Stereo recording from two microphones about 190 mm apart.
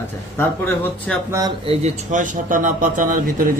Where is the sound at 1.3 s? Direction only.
20° right (ahead or behind).